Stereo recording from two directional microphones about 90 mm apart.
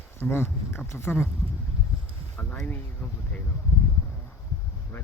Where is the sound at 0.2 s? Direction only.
25° left (ahead or behind).